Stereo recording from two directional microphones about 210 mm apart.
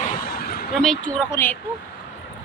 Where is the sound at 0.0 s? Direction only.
40° left (ahead or behind).